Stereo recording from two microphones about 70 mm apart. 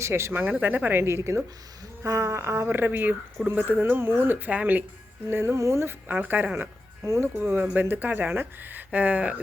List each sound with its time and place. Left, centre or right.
0.0 s speech: right
0.4 s speech: right
2.6 s speech: right
5.3 s speech: right
6.1 s speech: right
7.0 s speech: right
7.3 s speech: right